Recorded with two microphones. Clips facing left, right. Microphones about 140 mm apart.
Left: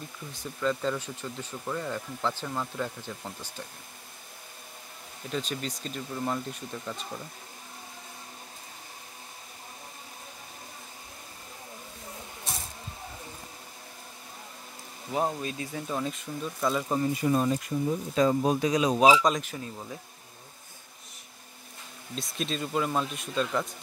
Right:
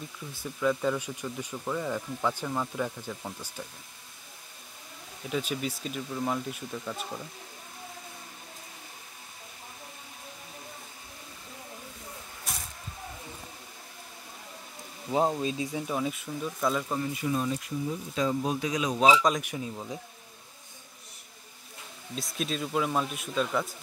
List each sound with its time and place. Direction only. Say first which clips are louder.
0.6 s speech: right 2 dB; 10° right (ahead or behind)
5.3 s speech: right 2 dB; 10° right (ahead or behind)
12.5 s spray: left 1 dB; 25° left (ahead or behind)
15.0 s speech: right 3 dB; 15° right (ahead or behind)
17.0 s speech: left 4 dB; 40° left (ahead or behind)
18.9 s a man's voice: even; 5° left (ahead or behind)
19.4 s speech: right 3 dB; 15° right (ahead or behind)
22.1 s a man's voice: even; centre (ahead or behind)